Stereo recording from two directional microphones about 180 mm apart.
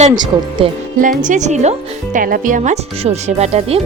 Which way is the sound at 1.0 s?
45° right (ahead or behind).